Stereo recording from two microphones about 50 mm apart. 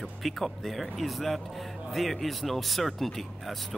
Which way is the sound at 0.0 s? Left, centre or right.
Centre.